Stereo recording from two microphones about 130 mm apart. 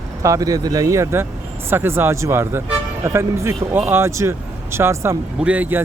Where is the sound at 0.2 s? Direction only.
25° right (ahead or behind).